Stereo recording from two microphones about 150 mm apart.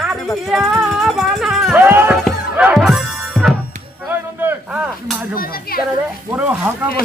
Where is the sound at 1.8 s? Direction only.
15° right (ahead or behind).